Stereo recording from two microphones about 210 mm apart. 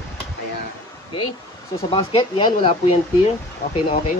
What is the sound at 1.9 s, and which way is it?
Speech, 25° left (ahead or behind).